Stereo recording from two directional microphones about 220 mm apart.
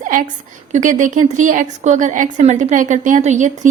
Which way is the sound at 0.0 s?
35° right (ahead or behind).